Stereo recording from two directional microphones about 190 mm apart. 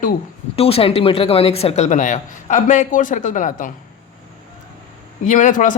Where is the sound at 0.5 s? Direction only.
30° left (ahead or behind).